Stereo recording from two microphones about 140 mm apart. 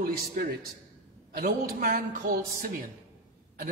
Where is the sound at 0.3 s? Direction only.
90° right.